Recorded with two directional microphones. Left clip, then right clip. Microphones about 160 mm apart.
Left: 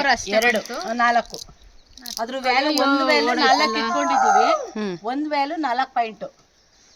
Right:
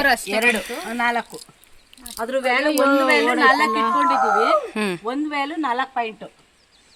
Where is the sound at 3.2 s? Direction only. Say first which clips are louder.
Right 1 dB; 55° left (ahead or behind).